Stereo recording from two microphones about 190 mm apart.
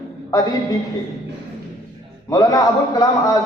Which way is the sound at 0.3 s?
20° left (ahead or behind).